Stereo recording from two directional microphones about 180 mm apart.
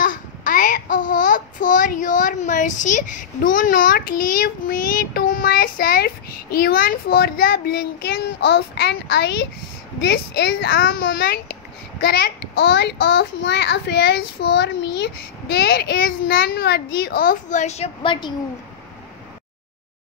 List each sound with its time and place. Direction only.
0.0 s a child's voice: 50° left (ahead or behind); by 11.1 s 90° left
11.1 s a child's voice: 60° left (ahead or behind); by 18.3 s 25° left (ahead or behind)